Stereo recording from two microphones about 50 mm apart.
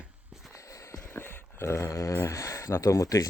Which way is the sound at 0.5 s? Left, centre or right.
Left.